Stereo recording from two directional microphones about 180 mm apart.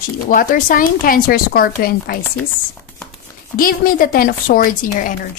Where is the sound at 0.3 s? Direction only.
50° left (ahead or behind).